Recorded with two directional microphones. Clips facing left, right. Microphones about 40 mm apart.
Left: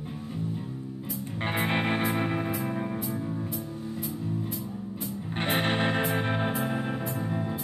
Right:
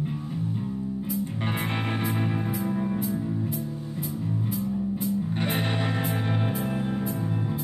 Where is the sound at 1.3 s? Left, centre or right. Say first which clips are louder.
Left 1 dB; left.